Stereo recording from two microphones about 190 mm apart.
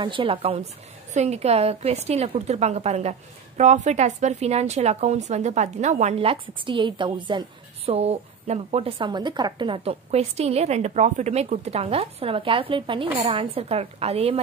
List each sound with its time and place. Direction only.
0.0 s a woman's voice: 25° right (ahead or behind)